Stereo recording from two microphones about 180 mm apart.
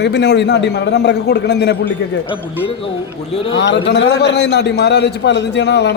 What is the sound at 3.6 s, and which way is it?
A man's voice, 75° left (ahead or behind).